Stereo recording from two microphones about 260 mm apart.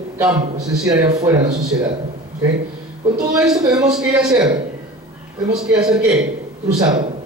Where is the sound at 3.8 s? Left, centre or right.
Centre.